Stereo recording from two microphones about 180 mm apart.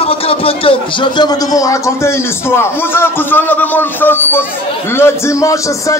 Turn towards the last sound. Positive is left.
turn(degrees=15)  # may be behind; listen again after turning